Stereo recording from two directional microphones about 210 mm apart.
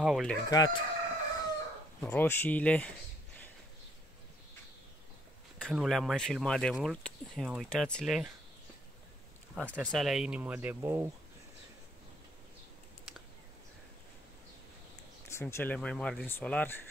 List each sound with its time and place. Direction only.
0.0 s speech: centre (ahead or behind)
0.5 s speech: 20° left (ahead or behind)
2.0 s speech: 10° left (ahead or behind)
5.6 s speech: centre (ahead or behind)
9.6 s speech: 5° left (ahead or behind)
15.2 s speech: 10° left (ahead or behind)